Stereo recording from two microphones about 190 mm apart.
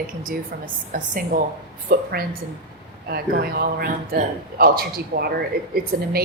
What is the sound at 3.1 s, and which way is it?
A man's voice, 55° right (ahead or behind).